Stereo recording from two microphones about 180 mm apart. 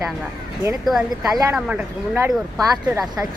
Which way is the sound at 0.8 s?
Centre (ahead or behind).